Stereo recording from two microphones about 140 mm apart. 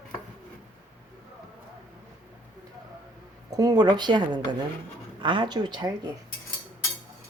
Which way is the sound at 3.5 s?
30° right (ahead or behind).